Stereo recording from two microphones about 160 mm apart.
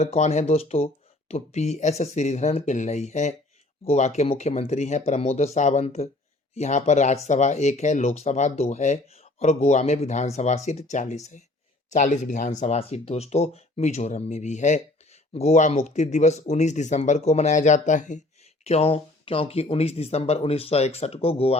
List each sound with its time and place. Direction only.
0.0 s speech: 40° left (ahead or behind)
18.6 s speech: 40° left (ahead or behind)